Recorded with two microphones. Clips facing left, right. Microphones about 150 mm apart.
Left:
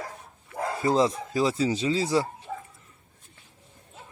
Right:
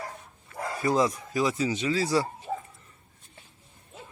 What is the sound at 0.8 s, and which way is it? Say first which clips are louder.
Speech: left 2 dB; 25° left (ahead or behind).